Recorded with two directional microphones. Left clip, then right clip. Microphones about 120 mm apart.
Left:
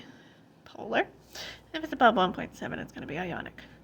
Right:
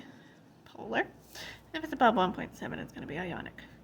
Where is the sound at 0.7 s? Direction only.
30° left (ahead or behind).